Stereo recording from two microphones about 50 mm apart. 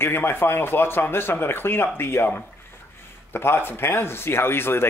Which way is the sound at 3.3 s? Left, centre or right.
Left.